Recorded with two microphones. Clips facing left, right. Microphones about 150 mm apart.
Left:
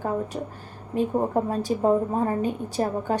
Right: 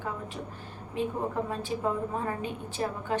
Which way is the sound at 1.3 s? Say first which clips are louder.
Left 7 dB; 40° left (ahead or behind).